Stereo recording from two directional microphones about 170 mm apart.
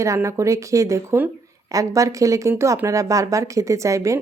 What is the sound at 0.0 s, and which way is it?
Speech, 20° right (ahead or behind).